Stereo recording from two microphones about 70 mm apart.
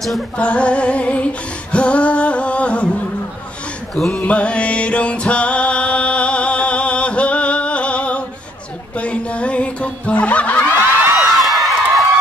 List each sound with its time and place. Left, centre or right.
0.4 s music: centre
4.1 s music: centre
11.1 s a sound: centre